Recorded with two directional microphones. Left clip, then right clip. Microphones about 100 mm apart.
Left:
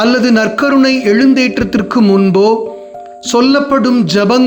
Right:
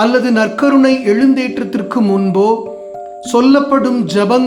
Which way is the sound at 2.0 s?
15° left (ahead or behind).